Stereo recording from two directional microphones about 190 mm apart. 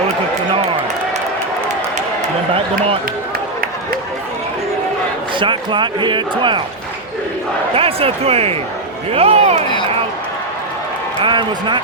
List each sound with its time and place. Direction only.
5.4 s speech: 25° right (ahead or behind)
7.8 s speech: 30° right (ahead or behind)
11.2 s speech: 25° right (ahead or behind)